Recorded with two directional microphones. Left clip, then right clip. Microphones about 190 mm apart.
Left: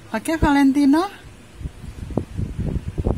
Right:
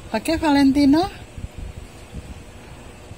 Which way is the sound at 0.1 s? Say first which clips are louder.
Even; 15° left (ahead or behind).